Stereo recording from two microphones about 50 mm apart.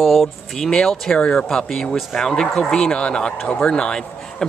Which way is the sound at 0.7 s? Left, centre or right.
Centre.